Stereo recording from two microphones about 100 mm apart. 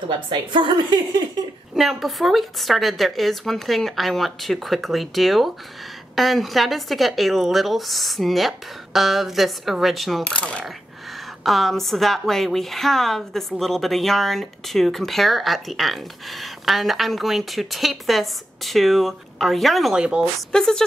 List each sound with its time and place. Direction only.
0.3 s a woman's voice: 50° right (ahead or behind)
1.8 s a woman's voice: centre (ahead or behind)
10.3 s mechanisms: 10° left (ahead or behind)
11.4 s a woman's voice: centre (ahead or behind)
20.5 s mechanisms: 5° left (ahead or behind)